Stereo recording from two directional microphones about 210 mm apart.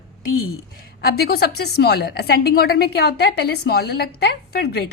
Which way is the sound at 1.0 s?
45° left (ahead or behind).